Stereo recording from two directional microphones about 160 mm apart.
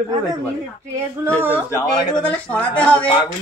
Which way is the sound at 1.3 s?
10° right (ahead or behind).